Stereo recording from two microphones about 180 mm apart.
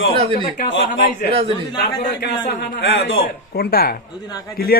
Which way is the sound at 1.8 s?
60° left (ahead or behind).